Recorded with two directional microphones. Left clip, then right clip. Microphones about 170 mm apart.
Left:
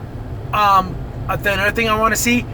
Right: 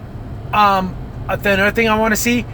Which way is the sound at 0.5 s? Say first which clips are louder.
Even; 35° right (ahead or behind).